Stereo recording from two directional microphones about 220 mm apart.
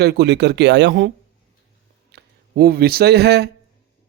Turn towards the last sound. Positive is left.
turn(degrees=-45)  # may be behind; listen again after turning